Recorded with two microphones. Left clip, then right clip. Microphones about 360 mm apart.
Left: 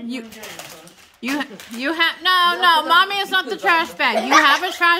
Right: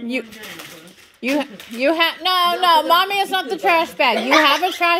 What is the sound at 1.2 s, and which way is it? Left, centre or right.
A woman's voice, centre.